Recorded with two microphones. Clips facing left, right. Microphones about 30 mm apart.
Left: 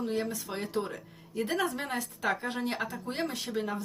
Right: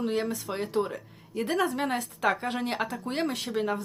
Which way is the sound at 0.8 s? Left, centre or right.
Centre.